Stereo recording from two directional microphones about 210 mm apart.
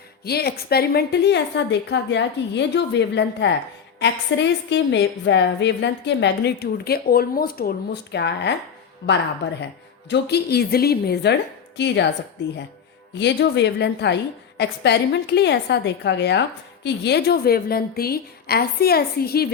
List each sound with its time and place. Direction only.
0.3 s a woman's voice: 50° left (ahead or behind)